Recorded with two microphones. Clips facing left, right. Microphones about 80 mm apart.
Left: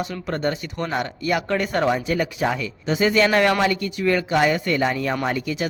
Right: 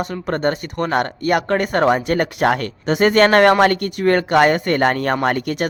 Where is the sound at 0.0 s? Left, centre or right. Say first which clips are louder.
Right 4 dB; right.